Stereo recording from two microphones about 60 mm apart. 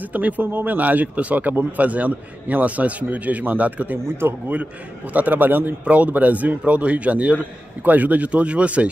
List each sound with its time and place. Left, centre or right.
0.0 s speech: right
4.2 s a man's voice: right
5.1 s speech: right